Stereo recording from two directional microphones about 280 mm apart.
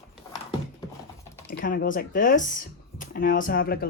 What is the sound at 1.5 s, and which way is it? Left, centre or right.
Speech, left.